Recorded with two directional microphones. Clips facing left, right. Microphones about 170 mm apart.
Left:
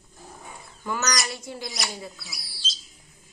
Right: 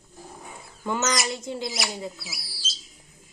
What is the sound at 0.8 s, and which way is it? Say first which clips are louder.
Speech: right 3 dB; 25° right (ahead or behind).